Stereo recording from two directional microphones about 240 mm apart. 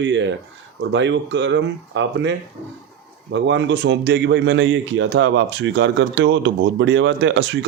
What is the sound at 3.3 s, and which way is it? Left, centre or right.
A man's voice, right.